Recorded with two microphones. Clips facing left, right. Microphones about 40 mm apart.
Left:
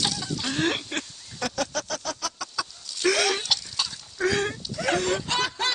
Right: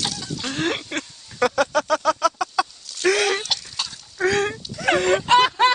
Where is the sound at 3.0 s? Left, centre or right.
Centre.